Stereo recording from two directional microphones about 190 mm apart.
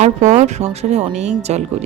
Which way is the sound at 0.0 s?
40° right (ahead or behind).